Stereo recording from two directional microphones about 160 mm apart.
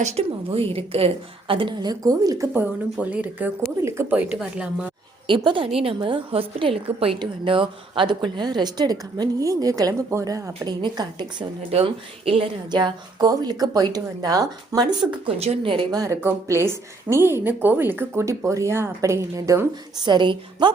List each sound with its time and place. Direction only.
0.0 s a woman's voice: 40° right (ahead or behind); by 2.5 s 20° right (ahead or behind)
2.5 s a woman's voice: 10° right (ahead or behind)
5.3 s a woman's voice: 30° right (ahead or behind)
15.4 s a woman's voice: 35° right (ahead or behind); by 19.6 s 15° right (ahead or behind)
20.0 s a woman's voice: 30° right (ahead or behind)